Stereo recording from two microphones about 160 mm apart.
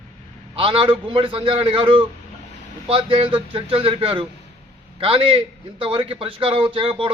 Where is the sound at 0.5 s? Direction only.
35° right (ahead or behind).